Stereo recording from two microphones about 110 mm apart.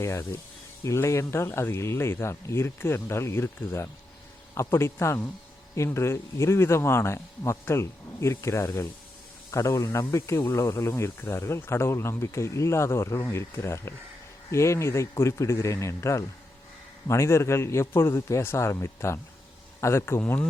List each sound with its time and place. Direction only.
0.0 s speech: 25° left (ahead or behind)